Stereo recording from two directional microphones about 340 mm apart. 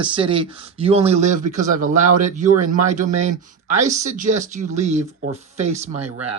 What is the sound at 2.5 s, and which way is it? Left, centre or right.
Speech, right.